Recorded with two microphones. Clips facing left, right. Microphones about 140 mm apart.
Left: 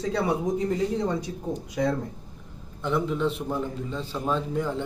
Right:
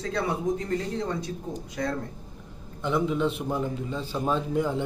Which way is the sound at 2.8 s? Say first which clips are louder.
Even; centre (ahead or behind).